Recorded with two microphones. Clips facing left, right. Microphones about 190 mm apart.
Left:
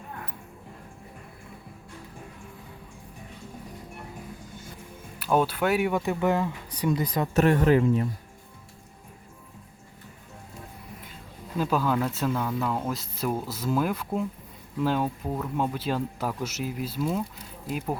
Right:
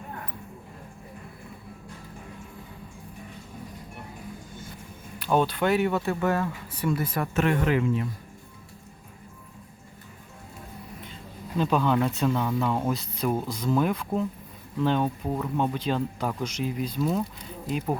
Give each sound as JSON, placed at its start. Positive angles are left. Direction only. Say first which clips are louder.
{"t": 5.2, "sound": "speech", "louder": "even", "side_deg": 5}
{"t": 7.3, "sound": "speech", "louder": "left 4 dB", "side_deg": 40}
{"t": 11.5, "sound": "speech", "louder": "right 2 dB", "side_deg": 5}